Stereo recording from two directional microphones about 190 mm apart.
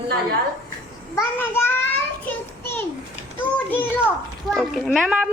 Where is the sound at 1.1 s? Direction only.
10° left (ahead or behind).